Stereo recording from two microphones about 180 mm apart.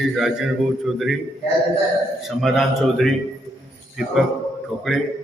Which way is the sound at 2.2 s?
Centre (ahead or behind).